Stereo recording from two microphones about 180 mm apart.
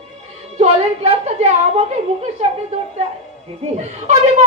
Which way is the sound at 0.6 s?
40° right (ahead or behind).